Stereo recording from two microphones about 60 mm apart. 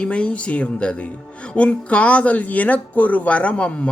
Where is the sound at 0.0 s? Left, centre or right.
Centre.